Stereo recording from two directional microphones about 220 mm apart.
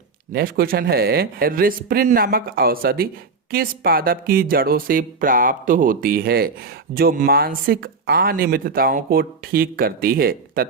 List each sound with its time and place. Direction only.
0.3 s speech: 40° right (ahead or behind)